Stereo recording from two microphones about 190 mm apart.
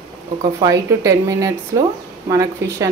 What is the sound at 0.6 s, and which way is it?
Speech, 15° right (ahead or behind).